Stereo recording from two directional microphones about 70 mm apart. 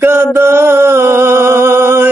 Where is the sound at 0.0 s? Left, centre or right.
Right.